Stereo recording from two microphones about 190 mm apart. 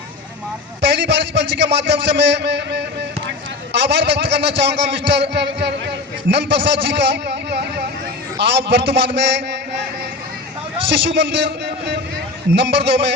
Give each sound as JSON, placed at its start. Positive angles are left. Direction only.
{"t": 0.8, "sound": "a man's voice", "side_deg": -65}
{"t": 10.8, "sound": "a man's voice", "side_deg": -65}